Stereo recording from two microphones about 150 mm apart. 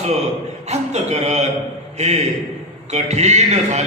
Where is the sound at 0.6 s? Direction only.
45° right (ahead or behind).